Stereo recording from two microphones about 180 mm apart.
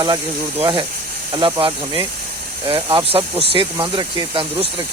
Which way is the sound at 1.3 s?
25° right (ahead or behind).